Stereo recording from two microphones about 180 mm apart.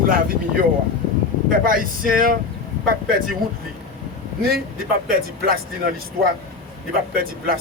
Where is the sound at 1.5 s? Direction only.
50° right (ahead or behind).